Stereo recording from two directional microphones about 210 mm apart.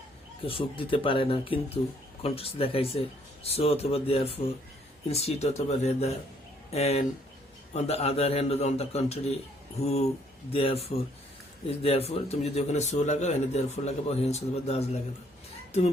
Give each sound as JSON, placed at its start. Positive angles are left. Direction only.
{"t": 0.4, "sound": "a man's voice", "side_deg": 25}